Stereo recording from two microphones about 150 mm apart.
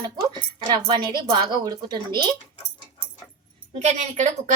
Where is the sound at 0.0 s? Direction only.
30° right (ahead or behind).